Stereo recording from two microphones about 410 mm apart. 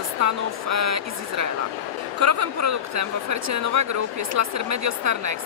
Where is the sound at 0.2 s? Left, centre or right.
Right.